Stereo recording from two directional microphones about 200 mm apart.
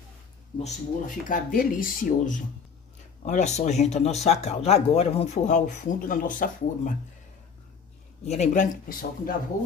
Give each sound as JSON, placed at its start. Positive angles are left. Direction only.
{"t": 1.0, "sound": "speech", "side_deg": 45}
{"t": 8.3, "sound": "speech", "side_deg": 35}